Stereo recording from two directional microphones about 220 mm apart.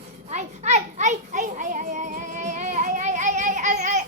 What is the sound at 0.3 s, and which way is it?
Children playing, 30° right (ahead or behind).